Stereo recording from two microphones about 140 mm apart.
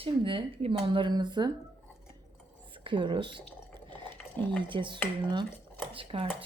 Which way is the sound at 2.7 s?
35° right (ahead or behind).